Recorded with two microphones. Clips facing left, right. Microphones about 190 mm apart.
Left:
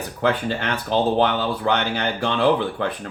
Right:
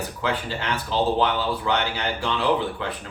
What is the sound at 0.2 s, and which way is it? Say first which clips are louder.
Speech: left 7 dB; 55° left (ahead or behind).